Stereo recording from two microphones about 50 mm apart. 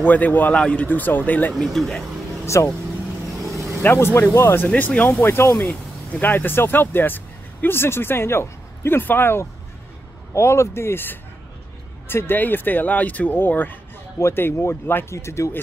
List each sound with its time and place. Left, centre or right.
0.0 s speech: left
0.6 s speech: centre
0.8 s speech: left
1.6 s speech: centre
2.4 s speech: left
3.5 s vehicle: right
3.8 s speech: left
4.7 s speech: left
5.2 s speech: left
10.3 s speech: left
14.2 s speech: left
15.0 s speech: left